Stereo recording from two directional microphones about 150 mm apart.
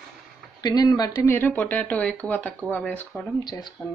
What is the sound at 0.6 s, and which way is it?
Speech, 25° left (ahead or behind).